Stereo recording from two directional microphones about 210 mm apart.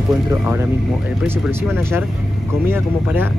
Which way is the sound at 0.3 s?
10° right (ahead or behind).